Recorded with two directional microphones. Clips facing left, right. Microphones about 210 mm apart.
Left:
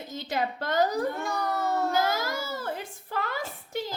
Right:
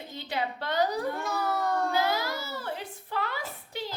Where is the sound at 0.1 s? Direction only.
45° left (ahead or behind).